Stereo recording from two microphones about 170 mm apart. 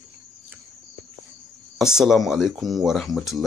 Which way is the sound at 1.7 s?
5° right (ahead or behind).